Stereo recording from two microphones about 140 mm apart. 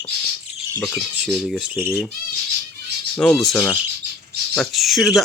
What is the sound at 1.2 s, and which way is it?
Speech, centre (ahead or behind).